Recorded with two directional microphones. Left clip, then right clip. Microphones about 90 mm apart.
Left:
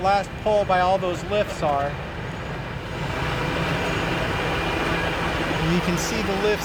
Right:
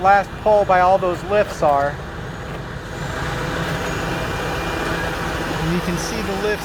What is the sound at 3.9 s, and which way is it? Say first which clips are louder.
Vehicle: right 1 dB; 20° right (ahead or behind).